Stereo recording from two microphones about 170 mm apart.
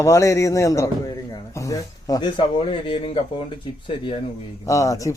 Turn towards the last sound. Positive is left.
turn(degrees=20)  # may be behind; listen again after turning